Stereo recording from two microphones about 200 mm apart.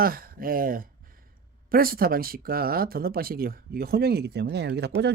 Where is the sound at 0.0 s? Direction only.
45° right (ahead or behind).